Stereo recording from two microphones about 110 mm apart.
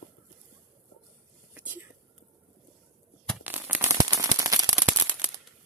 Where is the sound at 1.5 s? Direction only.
15° right (ahead or behind).